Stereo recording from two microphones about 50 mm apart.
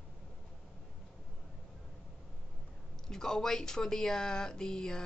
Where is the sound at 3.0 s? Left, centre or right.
Centre.